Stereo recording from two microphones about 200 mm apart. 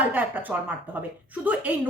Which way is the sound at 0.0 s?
10° right (ahead or behind).